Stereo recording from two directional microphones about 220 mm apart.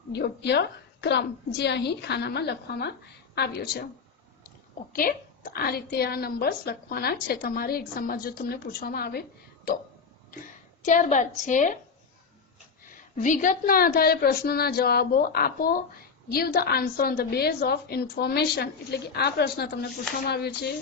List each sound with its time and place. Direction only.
0.1 s a woman's voice: 50° left (ahead or behind)
4.9 s a woman's voice: 40° left (ahead or behind)
10.8 s a woman's voice: 35° left (ahead or behind)
13.1 s a woman's voice: 35° left (ahead or behind)